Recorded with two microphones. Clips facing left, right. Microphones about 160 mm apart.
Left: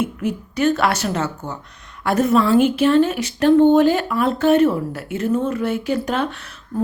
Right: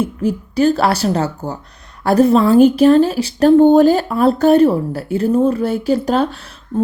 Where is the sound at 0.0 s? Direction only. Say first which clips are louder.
Right 4 dB; 35° right (ahead or behind).